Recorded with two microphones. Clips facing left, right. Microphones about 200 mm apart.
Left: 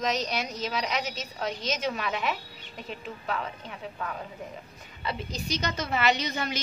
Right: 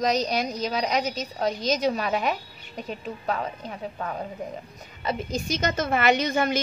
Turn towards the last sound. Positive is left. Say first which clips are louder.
# right 8 dB
turn(degrees=-50)  # may be behind; listen again after turning